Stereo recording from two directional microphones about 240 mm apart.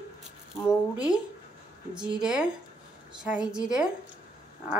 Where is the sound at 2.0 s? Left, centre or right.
Centre.